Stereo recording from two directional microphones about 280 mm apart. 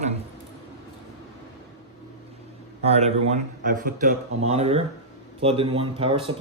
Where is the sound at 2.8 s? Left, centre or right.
Right.